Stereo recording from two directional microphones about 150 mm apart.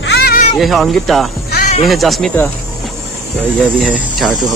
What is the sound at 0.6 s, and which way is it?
Speech, centre (ahead or behind).